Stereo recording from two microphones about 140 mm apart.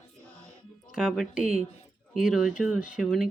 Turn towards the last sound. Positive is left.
turn(degrees=0)  # may be behind; listen again after turning